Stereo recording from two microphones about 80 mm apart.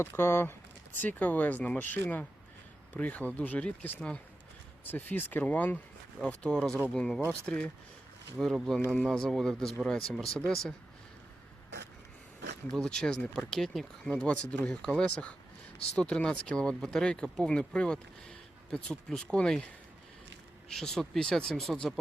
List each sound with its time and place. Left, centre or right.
0.0 s speech: left; by 7.7 s centre
8.4 s speech: centre
12.7 s speech: centre
20.7 s speech: centre